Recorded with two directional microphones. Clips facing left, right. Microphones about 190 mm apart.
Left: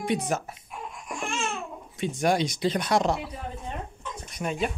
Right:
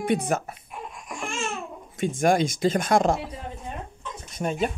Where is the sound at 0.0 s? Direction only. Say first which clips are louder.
Right 3 dB; 55° right (ahead or behind).